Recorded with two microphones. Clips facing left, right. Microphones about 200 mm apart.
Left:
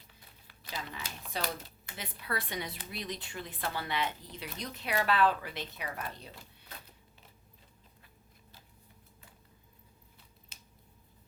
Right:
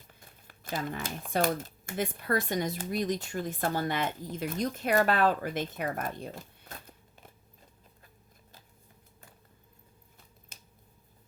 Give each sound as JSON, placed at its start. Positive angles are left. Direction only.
{"t": 0.1, "sound": "speech", "side_deg": -50}
{"t": 10.5, "sound": "scissors", "side_deg": -50}